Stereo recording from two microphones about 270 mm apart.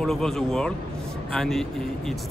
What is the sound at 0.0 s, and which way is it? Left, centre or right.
Speech, centre.